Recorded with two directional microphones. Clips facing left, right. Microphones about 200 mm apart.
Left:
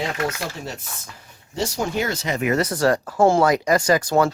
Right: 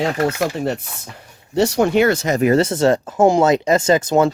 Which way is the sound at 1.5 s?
65° right (ahead or behind).